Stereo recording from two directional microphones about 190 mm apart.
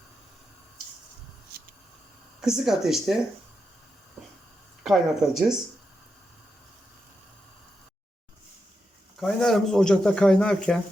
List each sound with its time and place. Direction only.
2.4 s speech: centre (ahead or behind)
4.8 s speech: centre (ahead or behind)
9.2 s speech: centre (ahead or behind)